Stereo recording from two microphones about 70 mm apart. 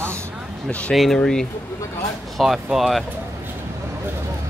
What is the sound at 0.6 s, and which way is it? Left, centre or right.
Speech, centre.